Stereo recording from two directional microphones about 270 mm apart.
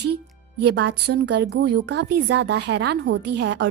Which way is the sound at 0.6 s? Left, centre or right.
Right.